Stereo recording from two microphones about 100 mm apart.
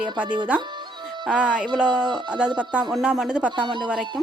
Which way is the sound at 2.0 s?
50° right (ahead or behind).